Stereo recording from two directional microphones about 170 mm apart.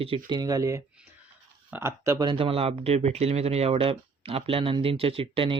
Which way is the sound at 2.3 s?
35° right (ahead or behind).